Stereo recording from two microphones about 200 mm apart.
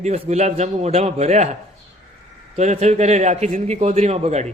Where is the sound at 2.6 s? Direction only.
35° right (ahead or behind).